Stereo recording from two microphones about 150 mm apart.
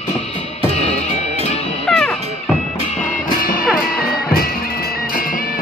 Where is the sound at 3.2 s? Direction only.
70° left (ahead or behind).